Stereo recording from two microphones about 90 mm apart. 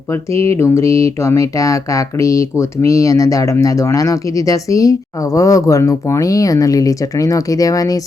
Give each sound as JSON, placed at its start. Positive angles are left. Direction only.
{"t": 0.1, "sound": "speech", "side_deg": 30}